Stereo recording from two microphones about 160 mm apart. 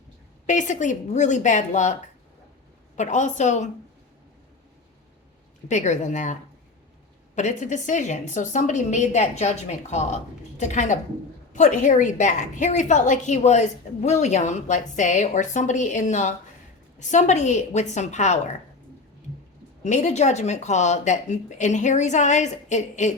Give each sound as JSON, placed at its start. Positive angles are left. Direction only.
{"t": 0.4, "sound": "a woman's voice", "side_deg": 50}
{"t": 5.6, "sound": "a woman's voice", "side_deg": 50}
{"t": 7.3, "sound": "a woman's voice", "side_deg": 50}
{"t": 19.8, "sound": "a woman's voice", "side_deg": 45}